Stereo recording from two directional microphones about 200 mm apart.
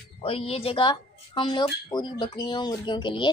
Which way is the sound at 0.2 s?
30° left (ahead or behind).